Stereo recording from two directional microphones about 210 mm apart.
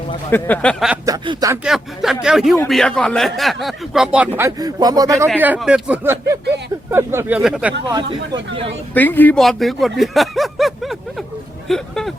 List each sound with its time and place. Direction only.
0.3 s speech: 10° left (ahead or behind)
1.0 s speech: 20° right (ahead or behind)
1.6 s speech: centre (ahead or behind)
7.9 s speech: 20° right (ahead or behind)
9.0 s speech: 10° left (ahead or behind)